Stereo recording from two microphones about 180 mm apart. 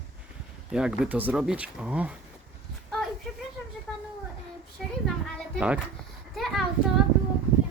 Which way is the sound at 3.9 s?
5° left (ahead or behind).